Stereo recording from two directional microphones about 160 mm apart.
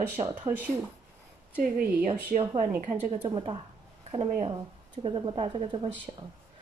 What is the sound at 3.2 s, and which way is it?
Speech, 30° right (ahead or behind).